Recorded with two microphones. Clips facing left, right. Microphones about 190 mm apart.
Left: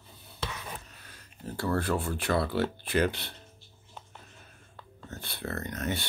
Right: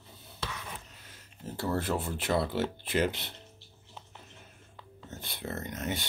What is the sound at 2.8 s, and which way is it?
Speech, 20° right (ahead or behind).